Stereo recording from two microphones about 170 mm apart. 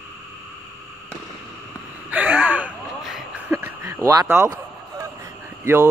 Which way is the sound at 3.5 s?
15° right (ahead or behind).